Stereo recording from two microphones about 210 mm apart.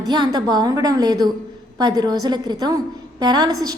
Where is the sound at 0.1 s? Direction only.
20° right (ahead or behind).